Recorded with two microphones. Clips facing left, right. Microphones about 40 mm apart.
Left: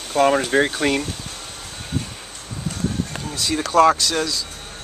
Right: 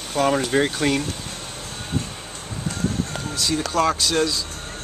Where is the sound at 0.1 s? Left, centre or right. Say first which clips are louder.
Left 3 dB; centre.